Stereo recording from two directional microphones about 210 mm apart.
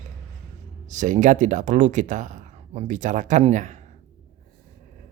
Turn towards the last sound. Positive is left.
turn(degrees=-35)  # may be behind; listen again after turning